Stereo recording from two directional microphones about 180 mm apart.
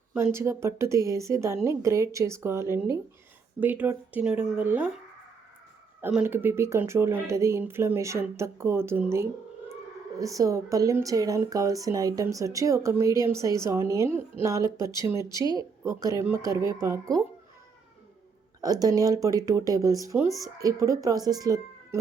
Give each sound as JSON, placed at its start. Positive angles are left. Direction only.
{"t": 0.1, "sound": "speech", "side_deg": -15}
{"t": 6.0, "sound": "speech", "side_deg": -10}
{"t": 18.6, "sound": "speech", "side_deg": -20}